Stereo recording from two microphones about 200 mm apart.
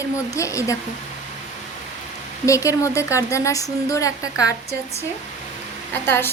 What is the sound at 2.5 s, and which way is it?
A woman's voice, 15° left (ahead or behind).